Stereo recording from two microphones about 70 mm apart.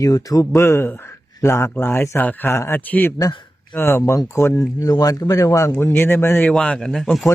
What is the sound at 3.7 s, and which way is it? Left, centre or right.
Speech, left.